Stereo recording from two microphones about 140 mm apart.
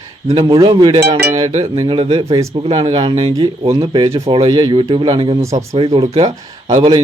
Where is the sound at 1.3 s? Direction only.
50° right (ahead or behind).